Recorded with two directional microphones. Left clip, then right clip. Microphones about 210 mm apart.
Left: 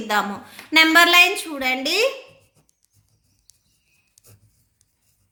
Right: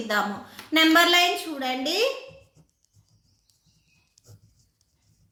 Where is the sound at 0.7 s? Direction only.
35° left (ahead or behind).